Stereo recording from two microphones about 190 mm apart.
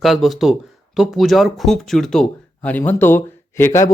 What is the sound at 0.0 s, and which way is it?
Speech, centre (ahead or behind).